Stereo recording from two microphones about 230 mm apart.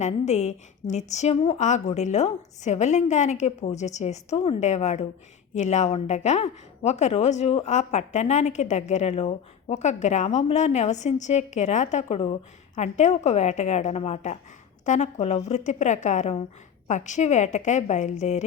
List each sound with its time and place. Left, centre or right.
0.0 s a woman's voice: left